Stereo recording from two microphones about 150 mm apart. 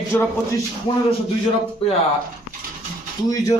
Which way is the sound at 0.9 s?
35° left (ahead or behind).